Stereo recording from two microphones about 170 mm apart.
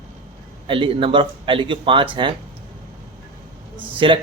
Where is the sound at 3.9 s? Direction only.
30° right (ahead or behind).